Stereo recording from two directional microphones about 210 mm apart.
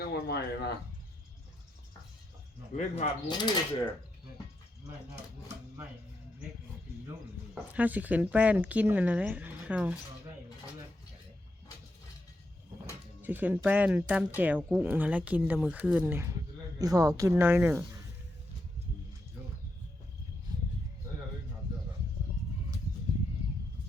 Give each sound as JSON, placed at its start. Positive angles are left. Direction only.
{"t": 0.0, "sound": "speech", "side_deg": 50}
{"t": 2.7, "sound": "speech", "side_deg": 30}
{"t": 3.2, "sound": "speech", "side_deg": 20}
{"t": 7.5, "sound": "speech", "side_deg": -5}
{"t": 13.2, "sound": "speech", "side_deg": -10}